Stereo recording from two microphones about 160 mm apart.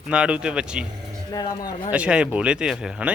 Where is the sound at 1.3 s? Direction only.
25° left (ahead or behind).